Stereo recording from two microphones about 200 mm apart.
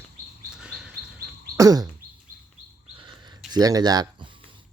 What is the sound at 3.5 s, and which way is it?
Speech, 20° right (ahead or behind).